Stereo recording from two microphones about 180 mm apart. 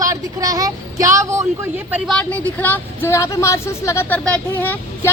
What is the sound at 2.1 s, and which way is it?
A woman's voice, 5° left (ahead or behind).